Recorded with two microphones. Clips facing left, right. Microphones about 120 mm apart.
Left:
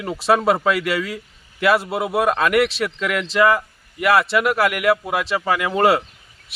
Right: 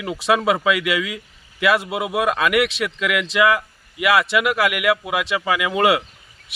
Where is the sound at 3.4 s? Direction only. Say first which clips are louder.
Left 1 dB; 35° left (ahead or behind).